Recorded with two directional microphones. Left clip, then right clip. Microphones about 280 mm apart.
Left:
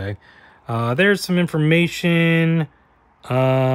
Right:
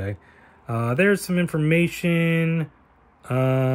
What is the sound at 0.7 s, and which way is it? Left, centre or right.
Speech, centre.